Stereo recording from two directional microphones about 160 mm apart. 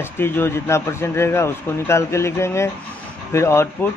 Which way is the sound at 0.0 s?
15° left (ahead or behind).